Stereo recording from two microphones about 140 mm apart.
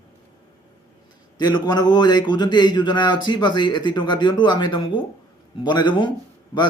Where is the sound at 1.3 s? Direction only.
30° left (ahead or behind).